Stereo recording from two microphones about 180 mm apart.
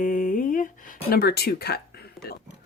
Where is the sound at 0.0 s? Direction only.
50° left (ahead or behind).